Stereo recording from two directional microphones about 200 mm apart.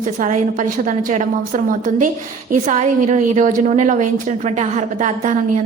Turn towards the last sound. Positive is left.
turn(degrees=-40)  # may be behind; listen again after turning